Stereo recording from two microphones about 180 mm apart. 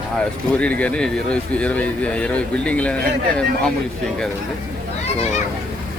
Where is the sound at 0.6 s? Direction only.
5° left (ahead or behind).